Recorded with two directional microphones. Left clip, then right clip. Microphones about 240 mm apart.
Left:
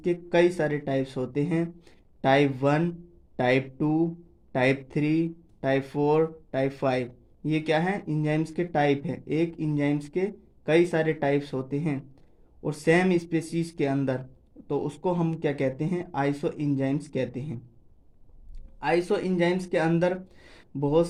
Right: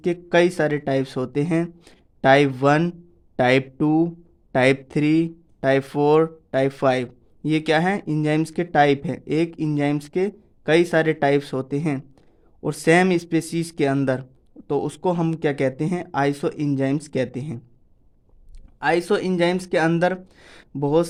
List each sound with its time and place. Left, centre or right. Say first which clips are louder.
0.0 s speech: right 4 dB; right
18.8 s speech: right 5 dB; right